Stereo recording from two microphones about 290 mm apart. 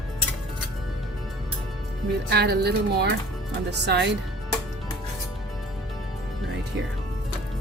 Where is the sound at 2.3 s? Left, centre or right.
Right.